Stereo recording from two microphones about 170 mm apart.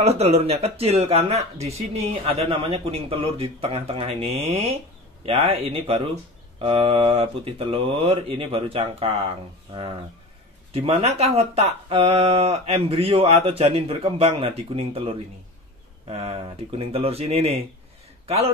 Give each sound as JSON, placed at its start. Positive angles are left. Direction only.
{"t": 0.0, "sound": "speech", "side_deg": -40}
{"t": 5.2, "sound": "speech", "side_deg": -35}
{"t": 10.7, "sound": "a man's voice", "side_deg": -35}